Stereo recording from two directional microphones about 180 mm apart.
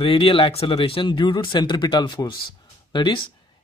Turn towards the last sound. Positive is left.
turn(degrees=25)  # may be behind; listen again after turning